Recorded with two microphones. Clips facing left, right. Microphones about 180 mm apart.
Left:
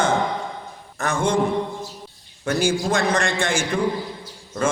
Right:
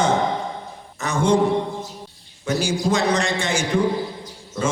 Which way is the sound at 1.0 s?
55° left (ahead or behind).